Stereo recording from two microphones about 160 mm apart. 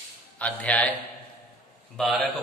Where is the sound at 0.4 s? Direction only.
10° left (ahead or behind).